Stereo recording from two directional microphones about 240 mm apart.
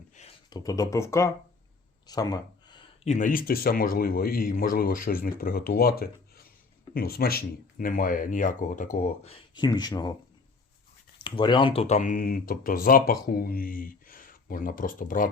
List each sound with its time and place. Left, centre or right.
0.2 s speech: left
11.2 s speech: centre; by 15.3 s left